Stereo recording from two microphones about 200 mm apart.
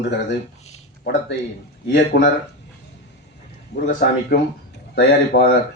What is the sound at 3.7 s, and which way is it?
Speech, 55° left (ahead or behind).